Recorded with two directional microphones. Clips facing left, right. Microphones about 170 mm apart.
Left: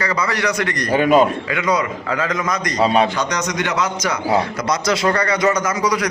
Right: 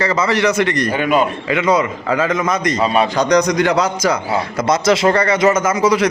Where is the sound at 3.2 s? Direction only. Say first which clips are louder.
Right 8 dB; 35° right (ahead or behind).